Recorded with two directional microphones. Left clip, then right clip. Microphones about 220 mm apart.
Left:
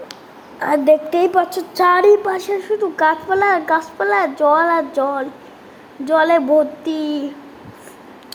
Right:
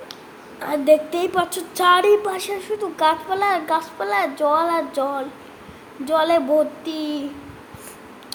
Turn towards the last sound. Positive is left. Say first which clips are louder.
# left 5 dB
turn(degrees=15)  # may be behind; listen again after turning